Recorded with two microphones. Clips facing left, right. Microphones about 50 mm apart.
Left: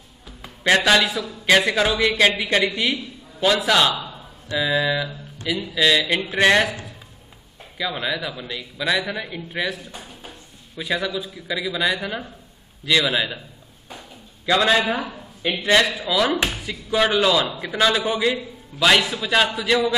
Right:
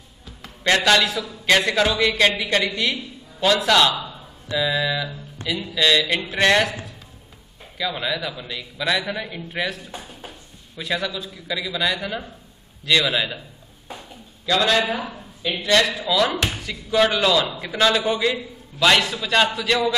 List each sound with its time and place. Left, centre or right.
0.4 s a man's voice: centre
7.7 s a man's voice: centre
10.8 s a man's voice: centre
14.4 s a man's voice: centre
15.8 s a man's voice: centre